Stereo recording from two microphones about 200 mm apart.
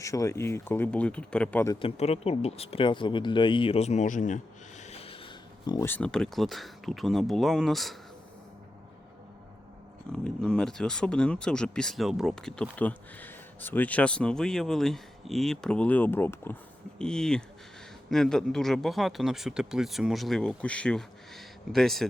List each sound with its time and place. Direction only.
0.0 s speech: 15° left (ahead or behind)
1.8 s speech: 30° left (ahead or behind)
4.8 s a sound: 30° left (ahead or behind)
5.9 s speech: 5° left (ahead or behind)
10.1 s speech: 5° left (ahead or behind)